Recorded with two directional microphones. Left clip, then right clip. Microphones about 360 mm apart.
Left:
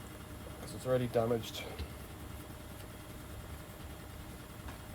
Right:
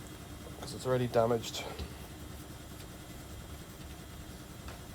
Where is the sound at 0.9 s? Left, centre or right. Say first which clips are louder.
Right 2 dB; centre.